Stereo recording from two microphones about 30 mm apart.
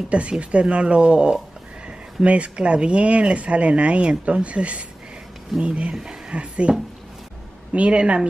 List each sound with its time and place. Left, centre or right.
0.3 s speech: right
7.7 s speech: right